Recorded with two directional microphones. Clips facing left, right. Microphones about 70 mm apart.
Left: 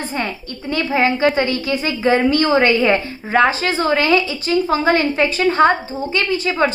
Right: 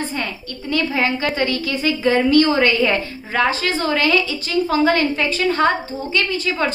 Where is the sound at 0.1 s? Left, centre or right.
Left.